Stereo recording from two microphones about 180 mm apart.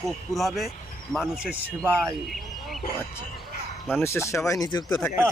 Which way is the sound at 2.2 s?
Centre (ahead or behind).